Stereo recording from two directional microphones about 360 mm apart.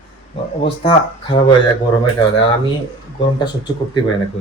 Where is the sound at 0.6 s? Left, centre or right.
Centre.